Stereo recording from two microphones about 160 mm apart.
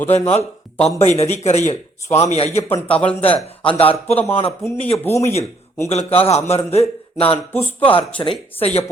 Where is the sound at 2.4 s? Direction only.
40° left (ahead or behind).